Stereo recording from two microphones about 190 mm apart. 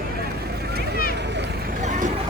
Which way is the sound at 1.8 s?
40° right (ahead or behind).